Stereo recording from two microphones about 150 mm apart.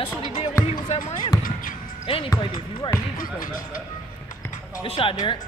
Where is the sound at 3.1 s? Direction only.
65° left (ahead or behind).